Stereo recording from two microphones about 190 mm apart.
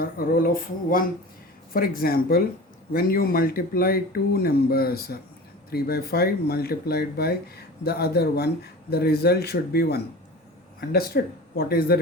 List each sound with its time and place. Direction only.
0.0 s speech: 50° left (ahead or behind)
1.7 s speech: 50° left (ahead or behind)